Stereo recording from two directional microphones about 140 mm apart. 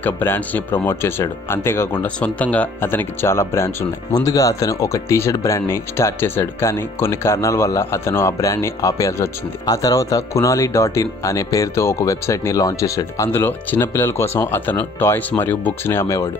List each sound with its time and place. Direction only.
0.0 s speech: 15° left (ahead or behind)